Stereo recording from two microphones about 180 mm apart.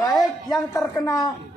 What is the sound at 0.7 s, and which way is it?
Speech, 20° left (ahead or behind).